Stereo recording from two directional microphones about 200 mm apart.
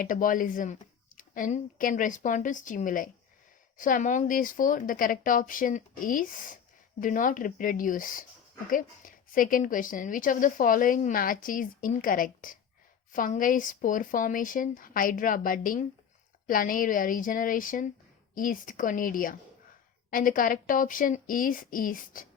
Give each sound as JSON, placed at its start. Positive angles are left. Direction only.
{"t": 0.0, "sound": "a woman's voice", "side_deg": 40}